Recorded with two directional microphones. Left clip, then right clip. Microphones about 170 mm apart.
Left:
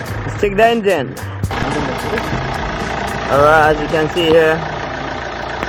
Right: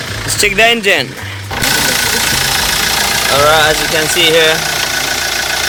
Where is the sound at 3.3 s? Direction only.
25° right (ahead or behind).